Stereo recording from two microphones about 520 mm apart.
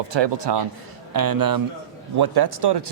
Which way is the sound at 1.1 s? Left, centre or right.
Right.